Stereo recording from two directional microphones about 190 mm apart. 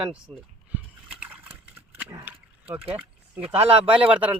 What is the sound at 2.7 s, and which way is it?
Speech, 30° right (ahead or behind).